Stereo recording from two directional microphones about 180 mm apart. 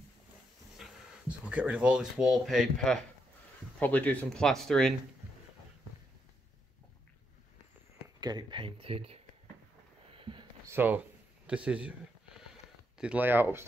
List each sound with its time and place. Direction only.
0.7 s speech: centre (ahead or behind)
8.2 s speech: 25° right (ahead or behind)
10.1 s a sound: 30° right (ahead or behind)
10.7 s speech: 10° right (ahead or behind)
12.9 s speech: 5° right (ahead or behind)